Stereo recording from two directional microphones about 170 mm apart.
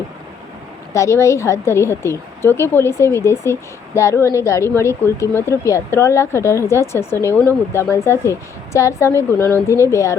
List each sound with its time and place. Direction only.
0.9 s a woman's voice: 15° left (ahead or behind)